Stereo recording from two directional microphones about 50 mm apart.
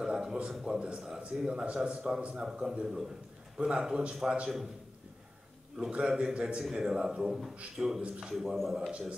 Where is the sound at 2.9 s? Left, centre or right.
Centre.